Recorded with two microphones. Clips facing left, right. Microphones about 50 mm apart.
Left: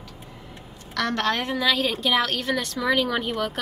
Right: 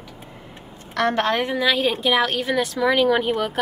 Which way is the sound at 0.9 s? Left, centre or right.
Right.